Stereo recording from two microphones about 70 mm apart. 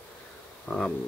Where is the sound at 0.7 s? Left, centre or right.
Left.